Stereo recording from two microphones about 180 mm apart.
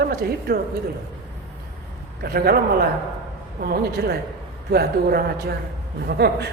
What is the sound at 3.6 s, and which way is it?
A woman's voice, 60° right (ahead or behind).